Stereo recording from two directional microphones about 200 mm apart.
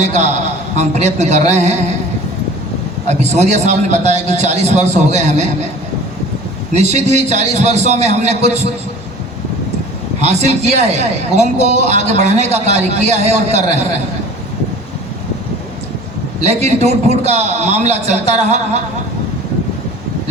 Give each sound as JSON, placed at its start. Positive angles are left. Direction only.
{"t": 0.0, "sound": "a man's voice", "side_deg": -35}
{"t": 3.1, "sound": "a man's voice", "side_deg": -35}
{"t": 6.7, "sound": "a man's voice", "side_deg": -35}
{"t": 10.2, "sound": "a man's voice", "side_deg": -35}
{"t": 16.4, "sound": "a man's voice", "side_deg": -35}